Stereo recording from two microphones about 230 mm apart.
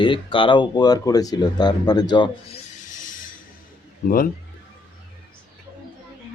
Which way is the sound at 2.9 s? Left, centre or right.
Left.